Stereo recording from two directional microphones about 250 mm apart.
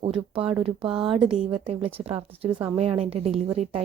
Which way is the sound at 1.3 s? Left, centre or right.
Right.